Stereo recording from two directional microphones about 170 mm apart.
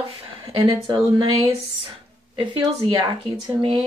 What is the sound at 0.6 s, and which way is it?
Speech, 30° right (ahead or behind).